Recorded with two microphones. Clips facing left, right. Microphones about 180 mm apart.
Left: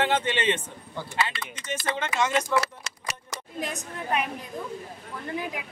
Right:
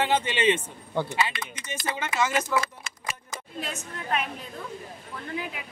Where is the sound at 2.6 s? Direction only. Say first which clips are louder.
Left 3 dB; 75° left (ahead or behind).